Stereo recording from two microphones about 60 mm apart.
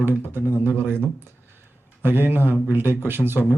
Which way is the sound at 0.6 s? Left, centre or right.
Right.